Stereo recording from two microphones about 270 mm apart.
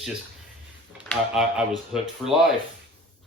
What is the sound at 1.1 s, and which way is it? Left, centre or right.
Speech, centre.